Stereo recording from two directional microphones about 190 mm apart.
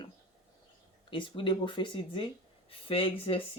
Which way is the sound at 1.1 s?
25° left (ahead or behind).